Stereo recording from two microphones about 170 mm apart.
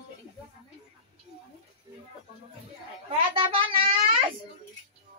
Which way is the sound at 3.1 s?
30° right (ahead or behind).